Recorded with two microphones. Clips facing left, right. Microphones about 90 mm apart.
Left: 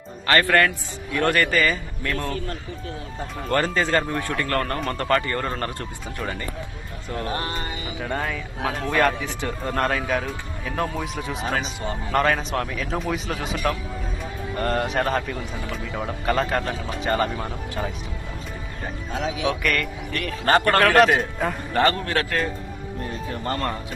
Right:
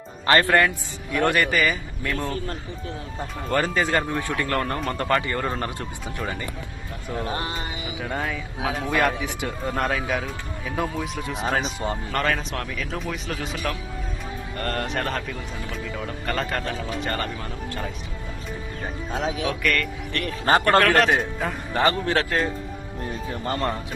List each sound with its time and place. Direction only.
0.3 s a man's voice: 20° right (ahead or behind)
3.5 s a man's voice: 5° right (ahead or behind)
7.3 s a man's voice: 20° right (ahead or behind)
7.5 s a man's voice: 10° right (ahead or behind)
14.6 s a man's voice: 5° left (ahead or behind)
19.1 s speech: 35° right (ahead or behind)
19.5 s a man's voice: centre (ahead or behind)
20.4 s speech: 20° right (ahead or behind)
20.8 s a man's voice: 5° left (ahead or behind)
21.7 s speech: 15° right (ahead or behind)
22.1 s a man's voice: 30° right (ahead or behind)
23.5 s speech: 15° right (ahead or behind)